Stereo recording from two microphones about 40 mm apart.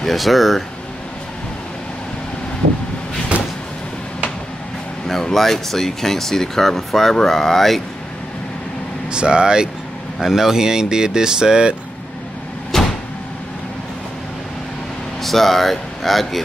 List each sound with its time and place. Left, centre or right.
0.0 s speech: centre
5.0 s speech: centre
9.1 s speech: right
12.7 s vehicle: centre
15.2 s speech: centre